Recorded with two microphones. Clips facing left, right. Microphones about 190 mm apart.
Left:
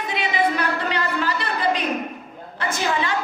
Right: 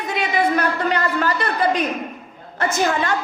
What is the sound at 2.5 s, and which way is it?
Speech, 45° right (ahead or behind).